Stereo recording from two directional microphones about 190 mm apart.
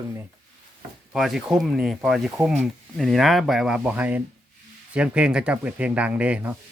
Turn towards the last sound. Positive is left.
turn(degrees=-5)  # may be behind; listen again after turning